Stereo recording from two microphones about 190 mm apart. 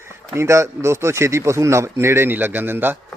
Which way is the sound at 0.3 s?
15° right (ahead or behind).